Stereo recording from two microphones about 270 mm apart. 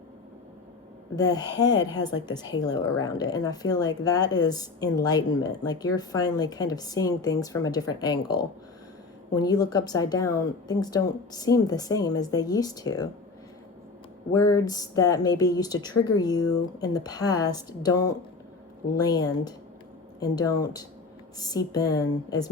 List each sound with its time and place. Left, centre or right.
1.1 s speech: centre
14.3 s speech: centre